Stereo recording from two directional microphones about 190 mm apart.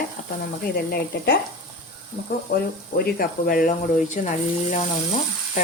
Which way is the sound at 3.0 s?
50° left (ahead or behind).